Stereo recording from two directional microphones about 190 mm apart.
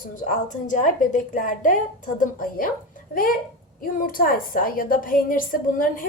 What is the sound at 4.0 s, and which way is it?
A woman's voice, 50° left (ahead or behind).